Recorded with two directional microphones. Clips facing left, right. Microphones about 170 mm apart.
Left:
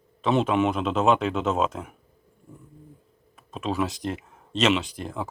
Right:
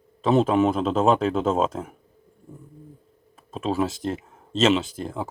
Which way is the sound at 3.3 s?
30° right (ahead or behind).